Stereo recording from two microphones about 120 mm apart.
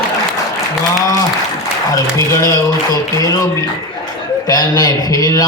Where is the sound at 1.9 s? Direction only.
30° left (ahead or behind).